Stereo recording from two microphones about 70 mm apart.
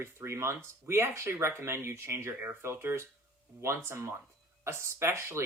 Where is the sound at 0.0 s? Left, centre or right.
Right.